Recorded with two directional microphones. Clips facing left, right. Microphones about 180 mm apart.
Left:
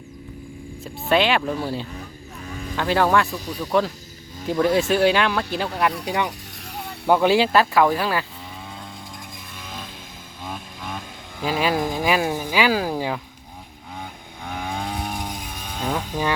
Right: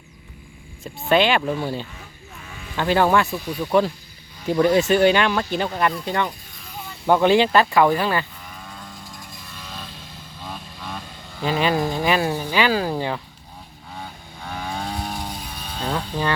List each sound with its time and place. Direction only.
1.0 s speech: centre (ahead or behind)
2.5 s music: 40° left (ahead or behind)
2.7 s speech: centre (ahead or behind)
6.7 s a sound: 70° left (ahead or behind)
7.1 s speech: 5° left (ahead or behind)
9.6 s vehicle: 15° left (ahead or behind)
10.4 s speech: 15° left (ahead or behind)
13.9 s vehicle: 15° left (ahead or behind)